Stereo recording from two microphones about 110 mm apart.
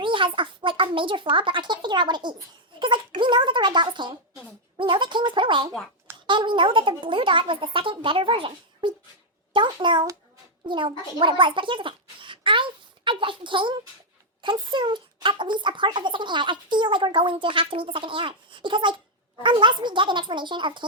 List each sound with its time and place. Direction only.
0.0 s a woman's voice: 50° right (ahead or behind)